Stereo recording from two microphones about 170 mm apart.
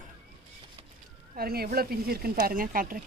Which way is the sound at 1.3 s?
60° right (ahead or behind).